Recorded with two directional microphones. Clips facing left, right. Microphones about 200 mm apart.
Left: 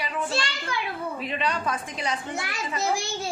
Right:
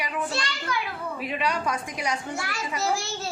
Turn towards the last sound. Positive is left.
turn(degrees=15)  # may be behind; listen again after turning